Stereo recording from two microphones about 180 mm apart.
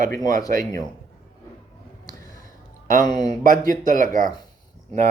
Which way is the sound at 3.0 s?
20° left (ahead or behind).